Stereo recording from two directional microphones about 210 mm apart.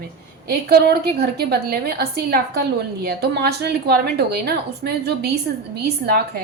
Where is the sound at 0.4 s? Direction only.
50° right (ahead or behind).